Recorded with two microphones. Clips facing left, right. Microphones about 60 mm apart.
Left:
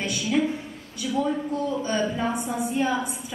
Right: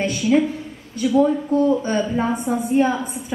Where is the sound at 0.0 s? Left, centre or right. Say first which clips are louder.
Right 8 dB; right.